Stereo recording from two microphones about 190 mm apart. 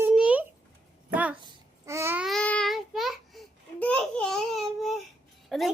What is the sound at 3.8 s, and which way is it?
Speech, 5° left (ahead or behind).